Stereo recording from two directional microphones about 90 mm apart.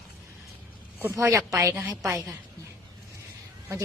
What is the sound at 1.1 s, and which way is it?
A woman's voice, 35° right (ahead or behind).